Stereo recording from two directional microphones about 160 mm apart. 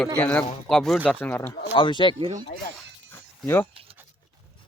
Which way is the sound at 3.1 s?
15° left (ahead or behind).